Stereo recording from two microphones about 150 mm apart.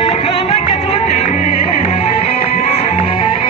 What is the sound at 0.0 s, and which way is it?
Music, 40° left (ahead or behind).